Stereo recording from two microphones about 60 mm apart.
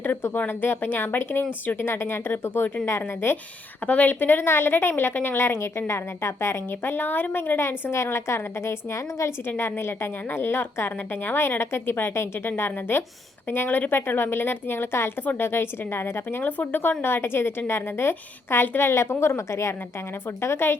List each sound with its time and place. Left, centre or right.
0.0 s a woman's voice: left
2.8 s a woman's voice: left
3.8 s a woman's voice: left
9.5 s a woman's voice: left
16.4 s speech: left
17.0 s a woman's voice: left
20.4 s a woman's voice: left